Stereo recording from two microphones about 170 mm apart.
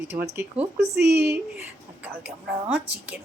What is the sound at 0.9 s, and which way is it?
Speech, 80° right.